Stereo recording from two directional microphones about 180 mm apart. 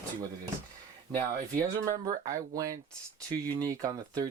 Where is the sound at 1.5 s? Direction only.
20° right (ahead or behind).